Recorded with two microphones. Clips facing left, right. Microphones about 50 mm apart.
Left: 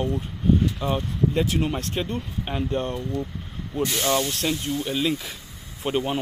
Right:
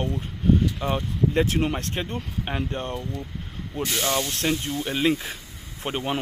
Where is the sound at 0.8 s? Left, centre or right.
Right.